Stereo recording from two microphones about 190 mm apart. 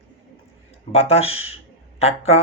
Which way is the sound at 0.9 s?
35° left (ahead or behind).